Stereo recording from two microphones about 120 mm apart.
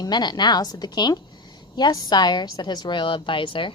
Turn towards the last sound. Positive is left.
turn(degrees=45)  # may be behind; listen again after turning